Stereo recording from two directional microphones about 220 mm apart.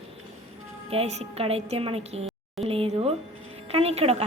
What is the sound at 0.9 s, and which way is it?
A woman's voice, 30° right (ahead or behind).